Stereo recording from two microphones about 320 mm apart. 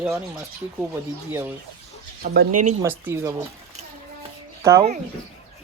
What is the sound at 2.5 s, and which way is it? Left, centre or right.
Speech, right.